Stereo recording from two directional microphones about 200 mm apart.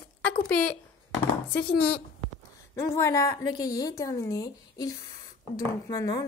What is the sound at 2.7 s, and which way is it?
A woman's voice, 15° left (ahead or behind).